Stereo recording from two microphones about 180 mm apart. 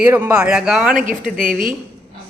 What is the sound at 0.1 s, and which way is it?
Speech, 20° right (ahead or behind).